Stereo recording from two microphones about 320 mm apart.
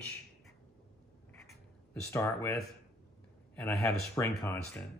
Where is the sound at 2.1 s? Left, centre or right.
Centre.